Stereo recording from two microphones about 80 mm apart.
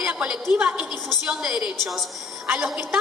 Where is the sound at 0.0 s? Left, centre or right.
Centre.